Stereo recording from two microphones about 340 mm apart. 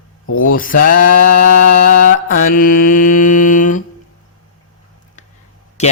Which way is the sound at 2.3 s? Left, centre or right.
Left.